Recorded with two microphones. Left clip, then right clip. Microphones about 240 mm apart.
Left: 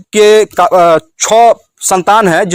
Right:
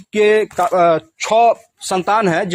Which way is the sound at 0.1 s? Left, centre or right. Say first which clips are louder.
Left 7 dB; left.